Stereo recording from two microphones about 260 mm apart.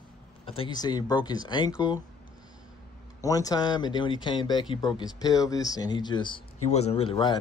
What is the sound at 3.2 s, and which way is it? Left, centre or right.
Speech, centre.